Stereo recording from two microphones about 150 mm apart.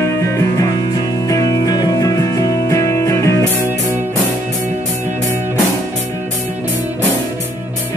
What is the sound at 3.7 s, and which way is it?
Music, 15° right (ahead or behind).